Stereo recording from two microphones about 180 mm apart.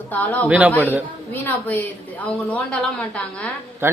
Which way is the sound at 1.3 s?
10° left (ahead or behind).